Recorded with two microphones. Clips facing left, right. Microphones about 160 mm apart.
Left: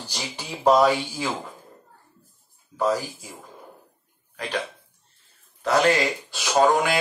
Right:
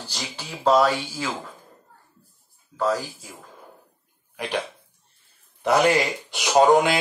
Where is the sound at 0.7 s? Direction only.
10° left (ahead or behind).